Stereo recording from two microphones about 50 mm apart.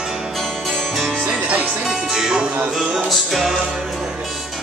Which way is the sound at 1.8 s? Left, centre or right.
Centre.